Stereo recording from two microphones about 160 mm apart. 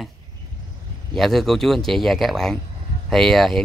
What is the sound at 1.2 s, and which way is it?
Speech, centre (ahead or behind).